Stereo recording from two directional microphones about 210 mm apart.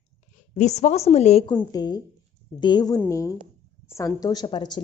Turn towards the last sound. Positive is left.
turn(degrees=20)  # may be behind; listen again after turning